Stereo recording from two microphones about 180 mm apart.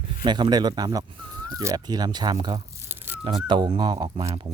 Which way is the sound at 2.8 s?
10° right (ahead or behind).